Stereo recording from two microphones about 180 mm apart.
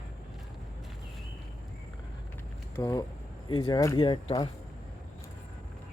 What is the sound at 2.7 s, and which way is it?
A man's voice, 20° left (ahead or behind).